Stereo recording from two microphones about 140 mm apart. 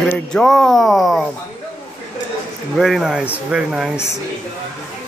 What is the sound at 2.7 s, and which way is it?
Speech, centre (ahead or behind).